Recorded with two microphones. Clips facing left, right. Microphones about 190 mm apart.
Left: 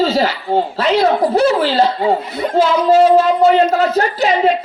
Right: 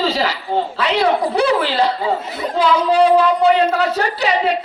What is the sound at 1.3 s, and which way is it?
Speech, 45° left (ahead or behind).